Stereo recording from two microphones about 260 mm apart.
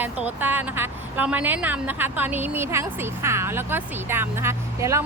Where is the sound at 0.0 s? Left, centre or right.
Centre.